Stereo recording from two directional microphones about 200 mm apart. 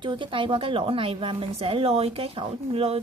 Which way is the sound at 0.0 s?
25° right (ahead or behind).